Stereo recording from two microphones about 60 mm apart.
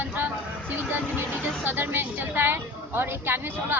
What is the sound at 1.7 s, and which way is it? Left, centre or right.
A woman's voice, right.